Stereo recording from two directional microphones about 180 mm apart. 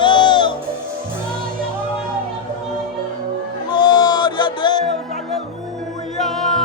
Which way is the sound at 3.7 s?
25° left (ahead or behind).